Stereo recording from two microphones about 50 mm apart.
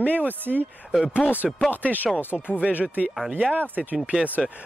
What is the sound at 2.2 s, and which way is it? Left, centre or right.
Speech, left.